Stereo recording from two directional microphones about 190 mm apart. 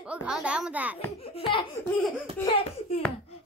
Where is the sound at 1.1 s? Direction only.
30° left (ahead or behind).